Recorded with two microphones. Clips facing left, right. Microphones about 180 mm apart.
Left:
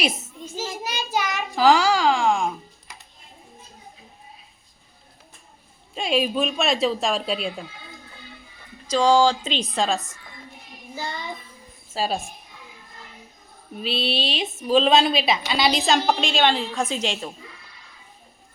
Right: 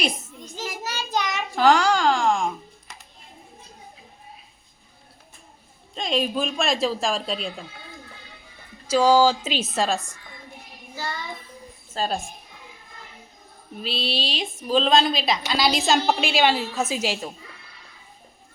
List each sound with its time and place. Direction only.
0.9 s child singing: 15° left (ahead or behind)
1.2 s a sound: centre (ahead or behind)
5.9 s a woman's voice: 5° left (ahead or behind)
8.9 s speech: 10° right (ahead or behind)
10.9 s child singing: 20° left (ahead or behind)
11.9 s a woman's voice: 5° left (ahead or behind)
13.8 s a woman's voice: centre (ahead or behind)